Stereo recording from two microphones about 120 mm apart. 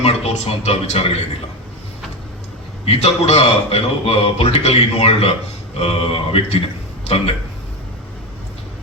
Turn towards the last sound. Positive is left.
turn(degrees=55)  # may be behind; listen again after turning